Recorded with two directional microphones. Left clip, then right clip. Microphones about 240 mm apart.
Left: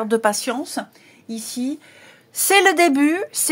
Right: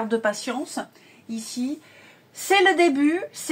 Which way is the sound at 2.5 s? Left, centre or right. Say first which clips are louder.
Left 3 dB; left.